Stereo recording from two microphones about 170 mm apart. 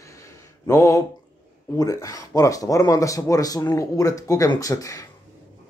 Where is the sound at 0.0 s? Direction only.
20° left (ahead or behind).